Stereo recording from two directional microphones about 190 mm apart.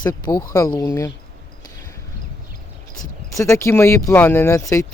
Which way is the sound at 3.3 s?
15° left (ahead or behind).